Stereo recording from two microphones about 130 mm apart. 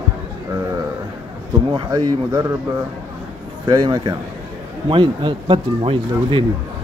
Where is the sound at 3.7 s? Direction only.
30° right (ahead or behind).